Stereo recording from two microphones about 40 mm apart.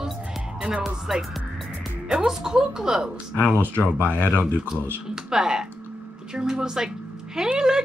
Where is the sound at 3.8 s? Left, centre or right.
Left.